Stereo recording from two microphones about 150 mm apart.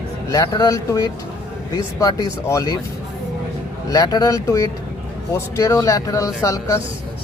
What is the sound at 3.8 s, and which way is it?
Speech, 25° left (ahead or behind).